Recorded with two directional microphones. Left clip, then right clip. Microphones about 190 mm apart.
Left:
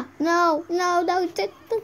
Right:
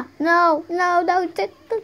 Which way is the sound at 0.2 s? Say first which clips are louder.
Right 4 dB; centre (ahead or behind).